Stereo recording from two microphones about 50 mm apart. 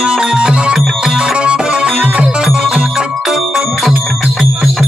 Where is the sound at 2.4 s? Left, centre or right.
Centre.